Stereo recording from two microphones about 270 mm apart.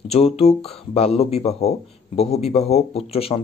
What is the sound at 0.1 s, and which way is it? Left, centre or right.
A man's voice, left.